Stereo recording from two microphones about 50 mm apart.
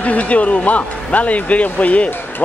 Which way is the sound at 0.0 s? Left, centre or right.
Left.